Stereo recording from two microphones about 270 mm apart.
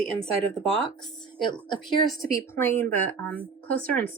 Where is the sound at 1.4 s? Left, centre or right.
Centre.